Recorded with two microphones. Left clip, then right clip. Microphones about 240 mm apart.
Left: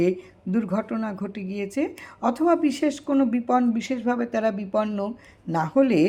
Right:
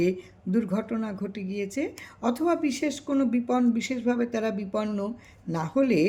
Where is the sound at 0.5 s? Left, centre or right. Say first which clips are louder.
Left 2 dB; centre.